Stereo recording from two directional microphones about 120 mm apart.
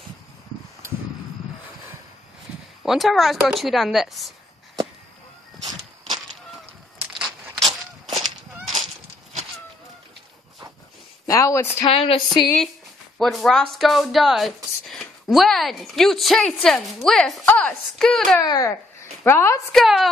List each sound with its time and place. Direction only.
2.8 s speech: centre (ahead or behind)
7.0 s a sound: centre (ahead or behind)
11.2 s speech: 25° left (ahead or behind)
11.8 s speech: 50° left (ahead or behind)
13.2 s speech: centre (ahead or behind)
18.4 s speech: 35° left (ahead or behind)
19.2 s a woman's voice: 20° left (ahead or behind)
19.7 s speech: centre (ahead or behind)